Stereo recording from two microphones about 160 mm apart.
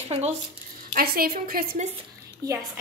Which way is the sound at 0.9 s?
70° right (ahead or behind).